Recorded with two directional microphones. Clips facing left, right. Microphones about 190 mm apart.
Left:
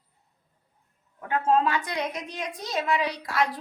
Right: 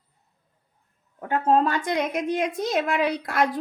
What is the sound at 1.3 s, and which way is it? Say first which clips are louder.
A woman's voice: right 2 dB; 40° right (ahead or behind).